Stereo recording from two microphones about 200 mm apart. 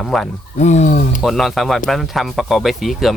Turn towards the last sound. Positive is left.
turn(degrees=0)  # may be behind; listen again after turning